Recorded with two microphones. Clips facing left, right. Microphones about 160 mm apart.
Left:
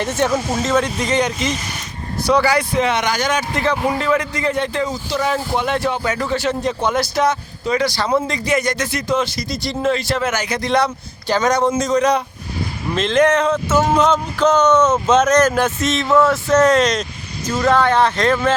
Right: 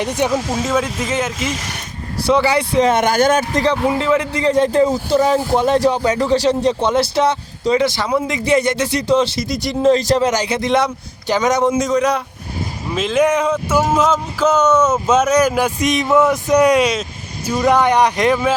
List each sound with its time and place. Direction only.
0.0 s speech: 15° right (ahead or behind)
2.2 s speech: 25° right (ahead or behind)
2.8 s speech: 50° right (ahead or behind)
3.9 s speech: 20° right (ahead or behind)